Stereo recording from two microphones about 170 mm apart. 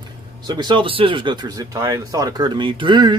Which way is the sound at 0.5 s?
25° right (ahead or behind).